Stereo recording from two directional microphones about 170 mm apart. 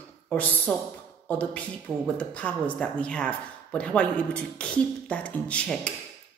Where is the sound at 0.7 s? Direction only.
10° left (ahead or behind).